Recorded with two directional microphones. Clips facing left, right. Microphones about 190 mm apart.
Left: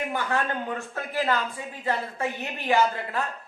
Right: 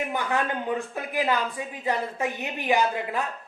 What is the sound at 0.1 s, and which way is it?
A woman's voice, 15° right (ahead or behind).